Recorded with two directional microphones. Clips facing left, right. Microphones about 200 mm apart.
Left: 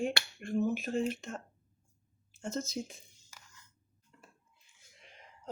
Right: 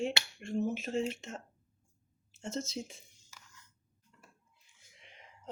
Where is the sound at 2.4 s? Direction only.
25° right (ahead or behind).